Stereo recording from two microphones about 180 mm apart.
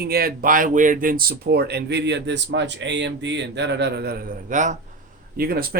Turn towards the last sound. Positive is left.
turn(degrees=-55)  # may be behind; listen again after turning